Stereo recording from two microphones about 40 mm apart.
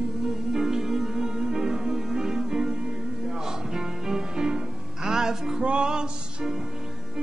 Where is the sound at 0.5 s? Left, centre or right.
Centre.